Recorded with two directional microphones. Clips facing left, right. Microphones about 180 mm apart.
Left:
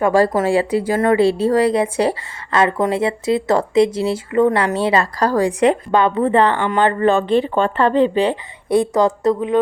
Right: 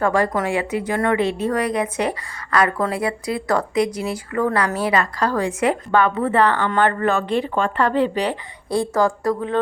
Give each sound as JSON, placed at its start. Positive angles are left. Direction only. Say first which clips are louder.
{"t": 0.1, "sound": "a woman's voice", "louder": "left 5 dB", "side_deg": 30}
{"t": 5.9, "sound": "a woman's voice", "louder": "left 3 dB", "side_deg": 25}